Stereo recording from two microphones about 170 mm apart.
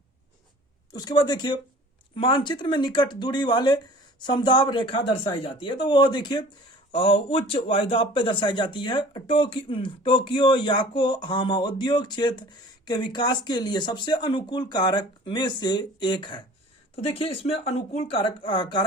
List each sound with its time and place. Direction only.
0.9 s speech: 25° left (ahead or behind)